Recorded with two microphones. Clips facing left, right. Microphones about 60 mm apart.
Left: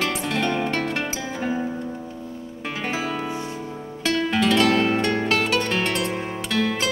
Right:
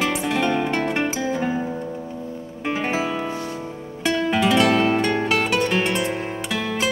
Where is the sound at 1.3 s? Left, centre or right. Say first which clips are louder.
Right 2 dB; centre.